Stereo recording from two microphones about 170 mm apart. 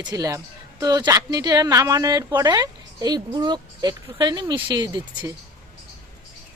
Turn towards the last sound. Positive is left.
turn(degrees=-25)  # may be behind; listen again after turning